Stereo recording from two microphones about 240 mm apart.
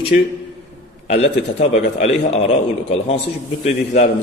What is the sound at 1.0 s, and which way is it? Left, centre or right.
A man's voice, left.